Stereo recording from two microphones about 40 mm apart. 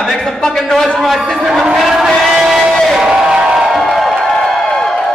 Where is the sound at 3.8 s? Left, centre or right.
Centre.